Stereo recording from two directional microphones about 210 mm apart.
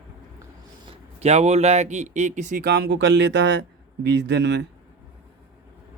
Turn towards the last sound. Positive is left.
turn(degrees=-55)  # may be behind; listen again after turning